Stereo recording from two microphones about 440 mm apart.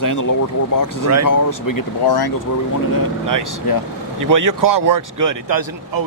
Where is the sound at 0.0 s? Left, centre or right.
Left.